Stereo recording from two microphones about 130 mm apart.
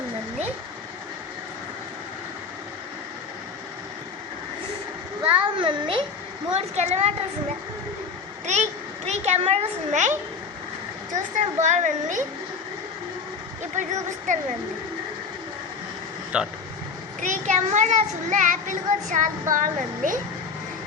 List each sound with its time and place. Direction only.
5.4 s a sound: 40° right (ahead or behind)
6.5 s a woman's voice: 55° right (ahead or behind)
8.5 s a sound: 60° right (ahead or behind)
9.0 s a child's voice: 55° right (ahead or behind)
11.1 s a child's voice: 70° right (ahead or behind)
13.8 s a child's voice: 70° right (ahead or behind)
16.3 s speech: 10° right (ahead or behind)
17.2 s a child's voice: 75° right (ahead or behind); by 20.1 s 90° right